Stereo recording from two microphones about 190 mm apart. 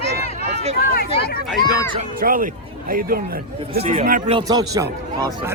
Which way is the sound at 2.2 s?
45° right (ahead or behind).